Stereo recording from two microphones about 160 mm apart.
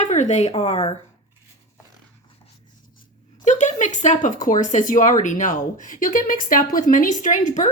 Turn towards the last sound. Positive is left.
turn(degrees=50)  # may be behind; listen again after turning